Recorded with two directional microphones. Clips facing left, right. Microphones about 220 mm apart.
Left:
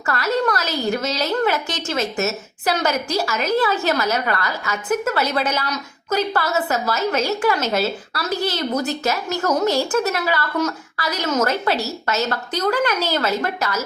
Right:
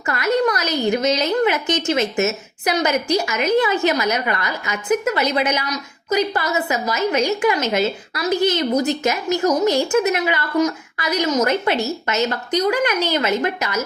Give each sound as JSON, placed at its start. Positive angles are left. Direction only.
{"t": 0.1, "sound": "a woman's voice", "side_deg": -20}